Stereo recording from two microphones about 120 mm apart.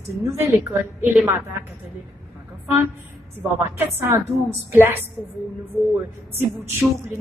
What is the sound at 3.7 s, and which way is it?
A woman's voice, 20° right (ahead or behind).